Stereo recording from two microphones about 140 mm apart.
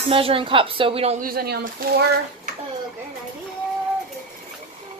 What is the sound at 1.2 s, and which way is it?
Speech, 90° right.